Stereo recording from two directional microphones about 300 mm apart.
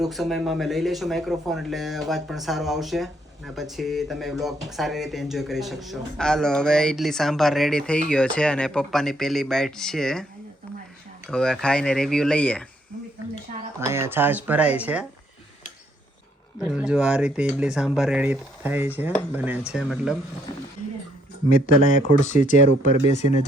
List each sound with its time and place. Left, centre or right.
0.0 s speech: centre
11.3 s speech: centre
13.7 s speech: centre
16.6 s speech: centre
21.5 s speech: left